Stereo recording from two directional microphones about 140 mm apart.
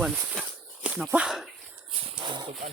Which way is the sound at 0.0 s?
Centre (ahead or behind).